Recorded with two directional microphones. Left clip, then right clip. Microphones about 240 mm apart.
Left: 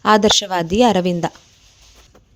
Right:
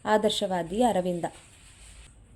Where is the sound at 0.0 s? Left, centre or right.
Left.